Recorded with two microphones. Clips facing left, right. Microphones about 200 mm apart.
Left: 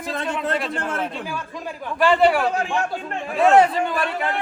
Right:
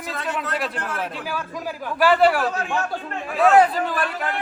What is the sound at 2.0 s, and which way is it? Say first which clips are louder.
Speech: even; 5° right (ahead or behind).